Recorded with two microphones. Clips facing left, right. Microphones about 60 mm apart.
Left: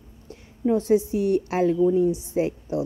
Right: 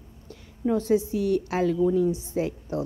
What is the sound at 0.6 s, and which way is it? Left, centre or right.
Speech, left.